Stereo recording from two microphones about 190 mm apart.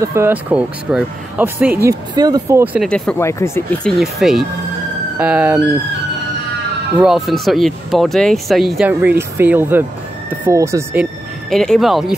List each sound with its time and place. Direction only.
0.0 s speech: 15° right (ahead or behind)
1.8 s speech: 20° right (ahead or behind)
2.9 s speech: 10° left (ahead or behind)
4.0 s speech: centre (ahead or behind)
7.0 s speech: centre (ahead or behind)
11.5 s speech: 5° left (ahead or behind)